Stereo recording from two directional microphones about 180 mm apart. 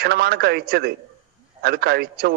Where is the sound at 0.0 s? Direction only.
60° right (ahead or behind).